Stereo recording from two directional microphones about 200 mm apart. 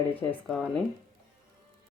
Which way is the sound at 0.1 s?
10° left (ahead or behind).